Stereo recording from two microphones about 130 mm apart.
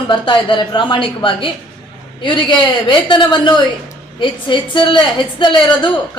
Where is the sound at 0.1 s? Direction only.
40° left (ahead or behind).